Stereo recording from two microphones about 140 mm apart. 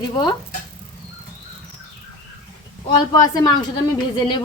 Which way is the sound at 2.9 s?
30° left (ahead or behind).